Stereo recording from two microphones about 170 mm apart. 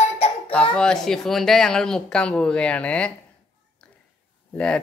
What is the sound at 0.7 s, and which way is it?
A woman's voice, 5° left (ahead or behind).